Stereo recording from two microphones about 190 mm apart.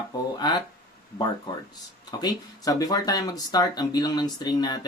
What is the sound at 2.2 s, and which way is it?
Speech, 20° left (ahead or behind).